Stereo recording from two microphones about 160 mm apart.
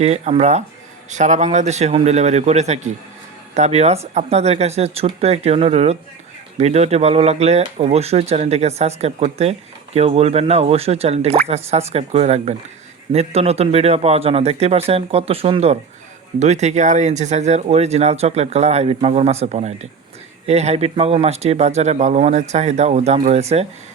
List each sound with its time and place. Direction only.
0.0 s speech: 40° right (ahead or behind)